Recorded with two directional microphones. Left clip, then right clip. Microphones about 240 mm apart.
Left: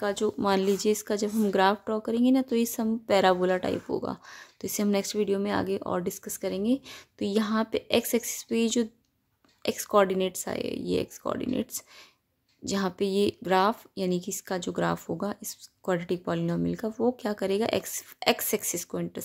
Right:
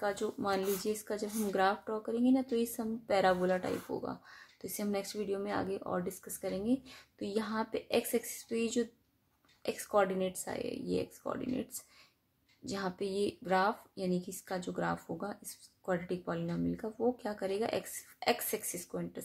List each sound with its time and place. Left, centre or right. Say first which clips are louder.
0.0 s speech: left 7 dB; left